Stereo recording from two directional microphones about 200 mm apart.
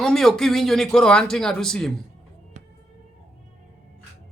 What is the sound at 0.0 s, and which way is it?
Speech, centre (ahead or behind).